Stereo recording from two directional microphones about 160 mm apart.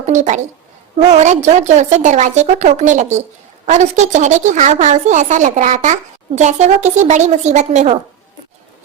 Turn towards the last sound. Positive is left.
turn(degrees=-45)  # may be behind; listen again after turning